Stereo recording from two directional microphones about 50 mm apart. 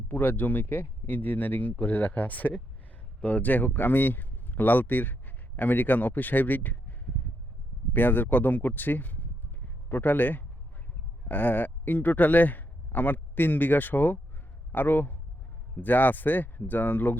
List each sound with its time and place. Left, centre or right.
0.1 s speech: left
7.9 s a man's voice: left